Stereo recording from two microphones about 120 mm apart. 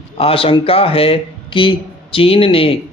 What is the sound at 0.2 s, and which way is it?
Speech, 50° left (ahead or behind).